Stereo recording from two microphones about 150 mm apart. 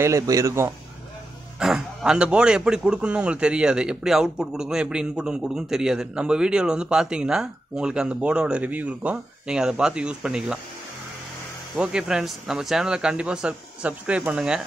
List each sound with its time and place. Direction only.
0.0 s a man's voice: 20° right (ahead or behind)
1.6 s a man's voice: 5° right (ahead or behind)
11.7 s a man's voice: 5° right (ahead or behind)